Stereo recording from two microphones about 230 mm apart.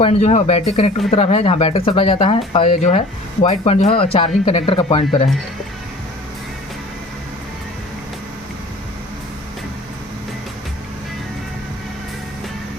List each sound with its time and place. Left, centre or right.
0.0 s speech: left